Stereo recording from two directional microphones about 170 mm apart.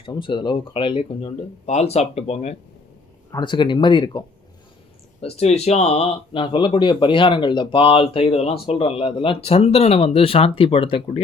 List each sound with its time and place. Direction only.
0.0 s speech: 30° left (ahead or behind)
3.3 s speech: 25° left (ahead or behind)
5.2 s speech: 40° left (ahead or behind)